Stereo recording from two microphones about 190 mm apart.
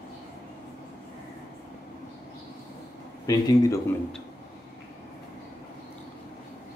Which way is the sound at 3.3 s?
20° left (ahead or behind).